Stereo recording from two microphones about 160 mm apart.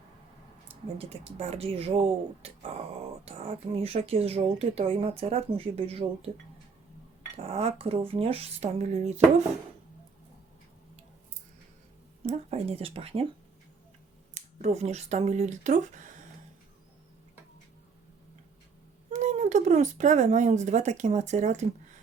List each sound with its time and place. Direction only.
0.9 s speech: 40° right (ahead or behind)
7.4 s speech: 40° right (ahead or behind)
12.2 s speech: 40° right (ahead or behind)
14.3 s speech: 45° right (ahead or behind)
19.1 s speech: 45° right (ahead or behind)